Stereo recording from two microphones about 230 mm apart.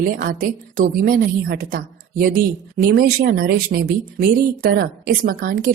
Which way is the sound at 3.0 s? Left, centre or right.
Right.